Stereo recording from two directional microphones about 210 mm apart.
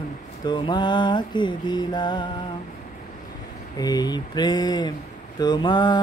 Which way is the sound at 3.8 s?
20° left (ahead or behind).